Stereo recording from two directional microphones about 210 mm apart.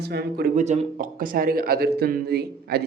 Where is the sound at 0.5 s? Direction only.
35° right (ahead or behind).